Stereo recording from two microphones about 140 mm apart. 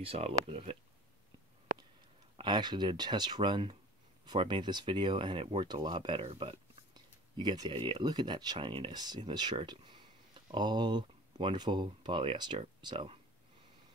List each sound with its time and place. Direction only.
0.0 s speech: 45° right (ahead or behind)
2.3 s speech: 30° right (ahead or behind)